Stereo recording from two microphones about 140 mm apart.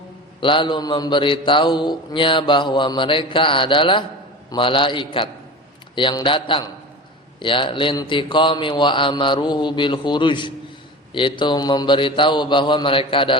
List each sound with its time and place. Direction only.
0.3 s a man's voice: 35° left (ahead or behind)